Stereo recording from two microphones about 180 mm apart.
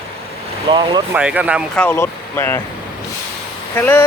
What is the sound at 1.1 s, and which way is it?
Speech, 10° right (ahead or behind).